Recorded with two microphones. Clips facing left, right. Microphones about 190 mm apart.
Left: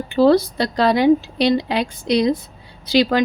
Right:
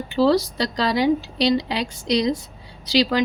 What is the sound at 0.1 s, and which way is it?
A woman's voice, 55° left (ahead or behind).